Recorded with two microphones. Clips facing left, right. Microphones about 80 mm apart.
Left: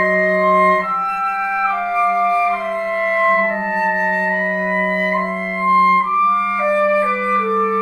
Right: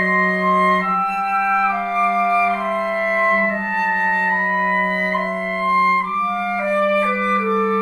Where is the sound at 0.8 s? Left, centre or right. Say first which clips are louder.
Even; centre.